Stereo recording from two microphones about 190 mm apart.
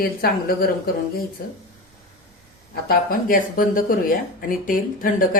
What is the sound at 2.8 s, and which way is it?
Speech, 50° left (ahead or behind).